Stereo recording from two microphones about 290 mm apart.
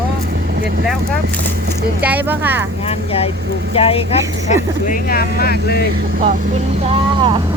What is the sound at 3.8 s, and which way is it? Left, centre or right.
Speech, centre.